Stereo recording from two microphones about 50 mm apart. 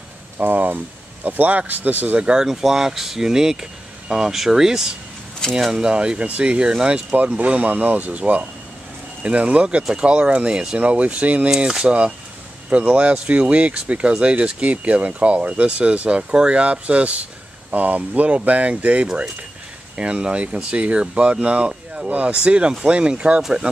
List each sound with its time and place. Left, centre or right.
0.4 s speech: right
2.2 s speech: centre; by 11.5 s right
11.5 s speech: centre